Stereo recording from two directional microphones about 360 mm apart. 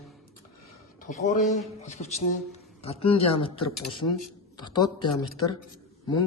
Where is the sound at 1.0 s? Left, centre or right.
Left.